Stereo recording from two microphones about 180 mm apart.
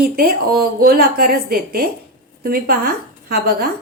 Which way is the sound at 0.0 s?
60° right (ahead or behind).